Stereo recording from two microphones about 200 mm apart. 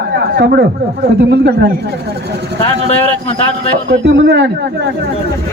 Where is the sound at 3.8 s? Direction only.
55° right (ahead or behind).